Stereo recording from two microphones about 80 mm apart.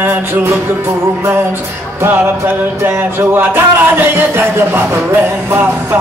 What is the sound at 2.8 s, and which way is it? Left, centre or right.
Speech, right.